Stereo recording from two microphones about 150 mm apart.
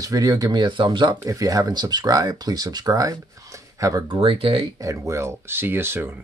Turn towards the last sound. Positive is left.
turn(degrees=-15)  # may be behind; listen again after turning